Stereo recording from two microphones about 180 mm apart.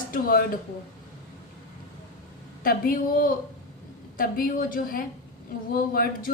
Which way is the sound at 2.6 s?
50° left (ahead or behind).